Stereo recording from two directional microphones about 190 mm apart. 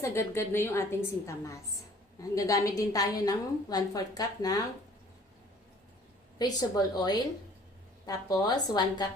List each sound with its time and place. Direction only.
0.0 s a woman's voice: 15° left (ahead or behind)
6.4 s a woman's voice: 20° left (ahead or behind)